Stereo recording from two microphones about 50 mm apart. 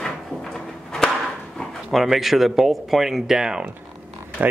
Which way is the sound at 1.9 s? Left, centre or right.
Centre.